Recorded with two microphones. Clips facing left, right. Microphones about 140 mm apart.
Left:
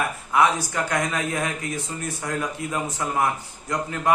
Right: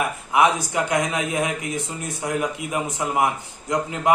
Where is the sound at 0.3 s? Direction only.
20° right (ahead or behind).